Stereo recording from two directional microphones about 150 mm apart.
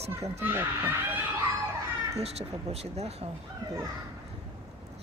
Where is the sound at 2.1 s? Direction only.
45° right (ahead or behind).